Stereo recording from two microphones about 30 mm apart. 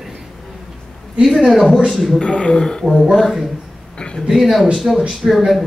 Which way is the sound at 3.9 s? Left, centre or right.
Left.